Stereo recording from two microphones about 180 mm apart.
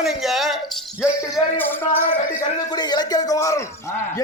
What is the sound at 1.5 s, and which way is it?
Speech, 10° left (ahead or behind).